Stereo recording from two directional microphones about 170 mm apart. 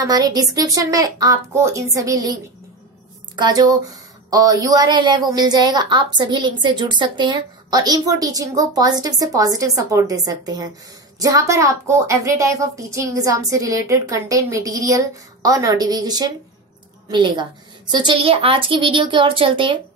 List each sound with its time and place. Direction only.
0.0 s speech: 20° right (ahead or behind)
3.3 s speech: 25° right (ahead or behind)